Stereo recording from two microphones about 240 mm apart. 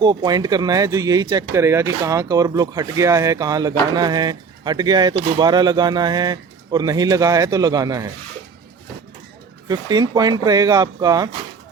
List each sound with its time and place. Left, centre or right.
0.0 s speech: centre
9.6 s speech: centre